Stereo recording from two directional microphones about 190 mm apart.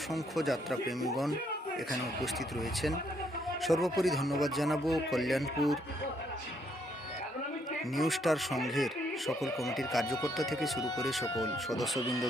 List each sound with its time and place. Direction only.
0.1 s speech: centre (ahead or behind)
7.9 s speech: centre (ahead or behind)
11.9 s speech: 15° left (ahead or behind)